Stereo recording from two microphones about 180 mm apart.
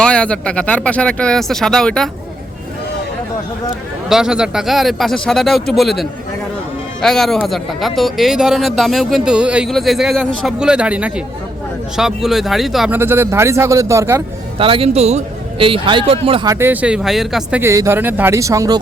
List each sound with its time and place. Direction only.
0.0 s speech: 5° left (ahead or behind)
4.1 s speech: 5° right (ahead or behind)
13.0 s speech: 10° right (ahead or behind)
14.6 s a man's voice: 30° right (ahead or behind)
16.5 s speech: 10° right (ahead or behind)
17.6 s speech: 15° right (ahead or behind)